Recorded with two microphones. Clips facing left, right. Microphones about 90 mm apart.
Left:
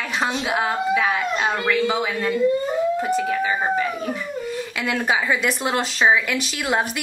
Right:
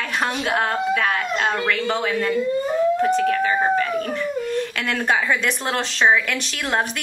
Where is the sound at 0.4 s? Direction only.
5° left (ahead or behind).